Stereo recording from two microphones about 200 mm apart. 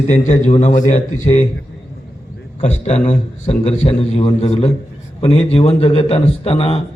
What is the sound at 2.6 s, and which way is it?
A man's voice, 35° left (ahead or behind).